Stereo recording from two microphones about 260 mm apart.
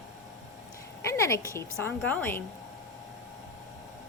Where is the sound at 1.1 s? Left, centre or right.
Centre.